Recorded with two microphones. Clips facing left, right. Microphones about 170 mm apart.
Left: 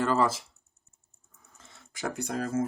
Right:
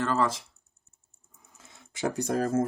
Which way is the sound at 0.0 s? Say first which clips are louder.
Left 1 dB; 10° left (ahead or behind).